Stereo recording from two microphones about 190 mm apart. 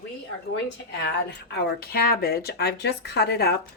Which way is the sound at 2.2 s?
55° left (ahead or behind).